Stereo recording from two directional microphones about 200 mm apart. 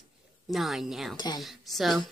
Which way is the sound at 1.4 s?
Centre (ahead or behind).